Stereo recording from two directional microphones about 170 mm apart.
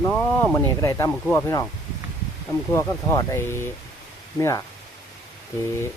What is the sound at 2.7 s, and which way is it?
Speech, 15° left (ahead or behind).